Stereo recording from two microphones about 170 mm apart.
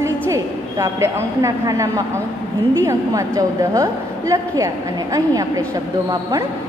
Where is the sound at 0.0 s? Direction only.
15° right (ahead or behind).